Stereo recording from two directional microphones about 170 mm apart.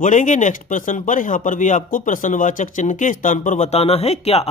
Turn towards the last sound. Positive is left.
turn(degrees=35)  # may be behind; listen again after turning